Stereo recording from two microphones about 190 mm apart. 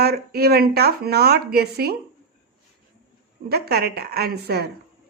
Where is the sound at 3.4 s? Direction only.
55° right (ahead or behind).